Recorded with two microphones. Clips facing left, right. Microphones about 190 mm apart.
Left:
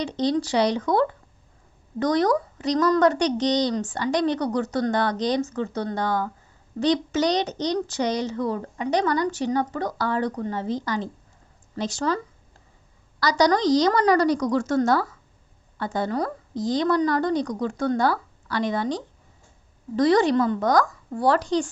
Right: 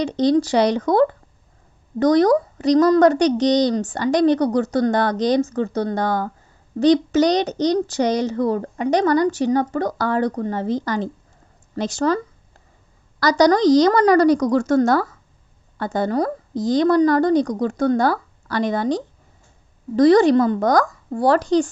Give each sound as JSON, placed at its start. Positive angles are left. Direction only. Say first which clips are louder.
{"t": 0.0, "sound": "a woman's voice", "louder": "right 6 dB", "side_deg": -45}